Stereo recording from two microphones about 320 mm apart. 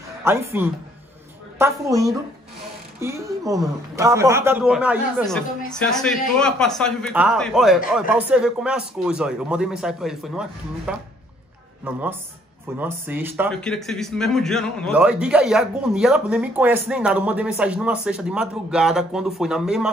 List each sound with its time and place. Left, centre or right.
0.2 s a man's voice: centre